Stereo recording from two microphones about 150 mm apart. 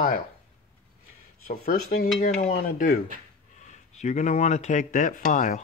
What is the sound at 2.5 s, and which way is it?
Speech, 65° left (ahead or behind).